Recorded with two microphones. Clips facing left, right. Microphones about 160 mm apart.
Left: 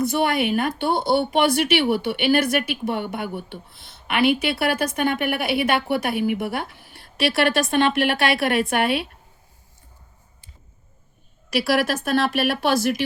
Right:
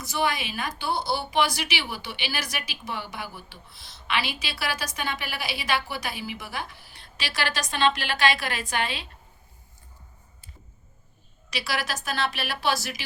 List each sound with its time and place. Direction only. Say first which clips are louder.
0.0 s speech: left 7 dB; 55° left (ahead or behind)
11.5 s speech: left 10 dB; 60° left (ahead or behind)